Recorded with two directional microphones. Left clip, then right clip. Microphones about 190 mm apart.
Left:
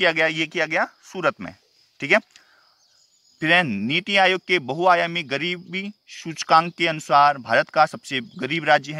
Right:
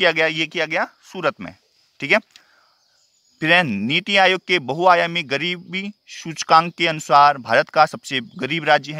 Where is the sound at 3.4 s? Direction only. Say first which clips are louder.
Right 2 dB; 35° right (ahead or behind).